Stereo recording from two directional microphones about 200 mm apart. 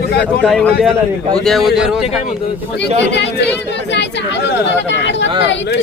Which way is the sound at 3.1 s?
60° left (ahead or behind).